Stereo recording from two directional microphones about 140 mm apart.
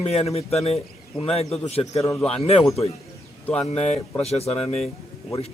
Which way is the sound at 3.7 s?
50° left (ahead or behind).